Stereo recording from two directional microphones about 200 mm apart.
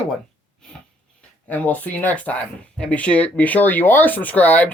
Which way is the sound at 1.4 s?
10° left (ahead or behind).